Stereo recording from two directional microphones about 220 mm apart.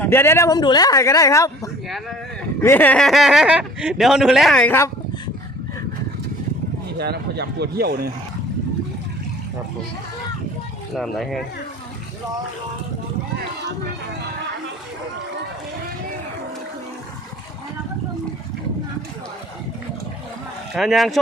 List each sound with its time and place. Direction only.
0.0 s speech: 10° left (ahead or behind)
7.0 s speech: 50° right (ahead or behind)
10.9 s speech: centre (ahead or behind)
20.7 s speech: centre (ahead or behind)